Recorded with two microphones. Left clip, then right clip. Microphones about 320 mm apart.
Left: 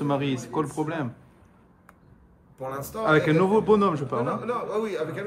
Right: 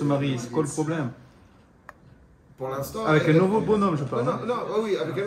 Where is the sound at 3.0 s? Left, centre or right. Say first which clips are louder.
Even; left.